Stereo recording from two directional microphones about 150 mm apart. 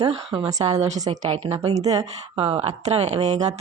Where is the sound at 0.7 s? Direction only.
50° right (ahead or behind).